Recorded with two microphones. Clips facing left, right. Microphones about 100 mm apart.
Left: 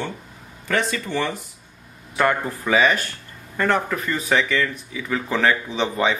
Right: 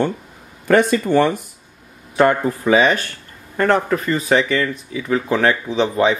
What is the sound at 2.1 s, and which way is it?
Speech, 20° right (ahead or behind).